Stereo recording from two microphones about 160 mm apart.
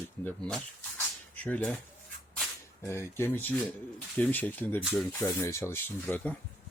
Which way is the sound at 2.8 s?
15° left (ahead or behind).